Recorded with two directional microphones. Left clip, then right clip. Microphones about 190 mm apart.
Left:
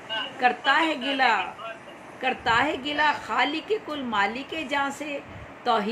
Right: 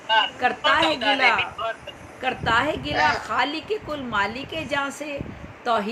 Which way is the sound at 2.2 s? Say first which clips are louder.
Right 1 dB; 5° left (ahead or behind).